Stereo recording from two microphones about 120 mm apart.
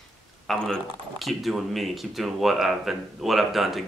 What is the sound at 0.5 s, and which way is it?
Speech, centre (ahead or behind).